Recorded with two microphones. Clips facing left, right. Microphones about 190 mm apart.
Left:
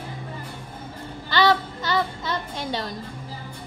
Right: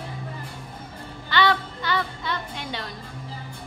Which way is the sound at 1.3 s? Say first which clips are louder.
Left 2 dB; 40° left (ahead or behind).